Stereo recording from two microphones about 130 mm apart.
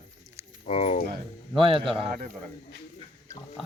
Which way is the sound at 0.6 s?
60° left (ahead or behind).